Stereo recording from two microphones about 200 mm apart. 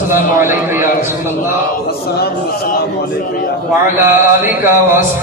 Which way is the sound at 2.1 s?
50° left (ahead or behind).